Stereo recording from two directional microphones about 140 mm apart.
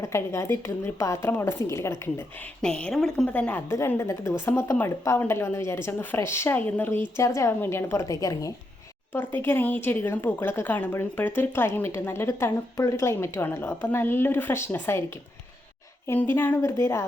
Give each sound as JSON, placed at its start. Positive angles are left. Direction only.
{"t": 0.0, "sound": "a woman's voice", "side_deg": 20}
{"t": 2.6, "sound": "a woman's voice", "side_deg": 5}
{"t": 16.0, "sound": "a woman's voice", "side_deg": 15}